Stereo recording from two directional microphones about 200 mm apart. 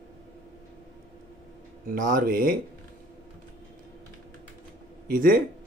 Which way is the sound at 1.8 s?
45° right (ahead or behind).